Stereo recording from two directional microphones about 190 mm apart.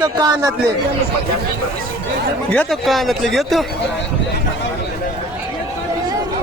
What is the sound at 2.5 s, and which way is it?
Speech, 5° left (ahead or behind).